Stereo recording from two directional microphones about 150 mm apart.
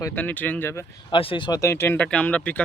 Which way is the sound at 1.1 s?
35° left (ahead or behind).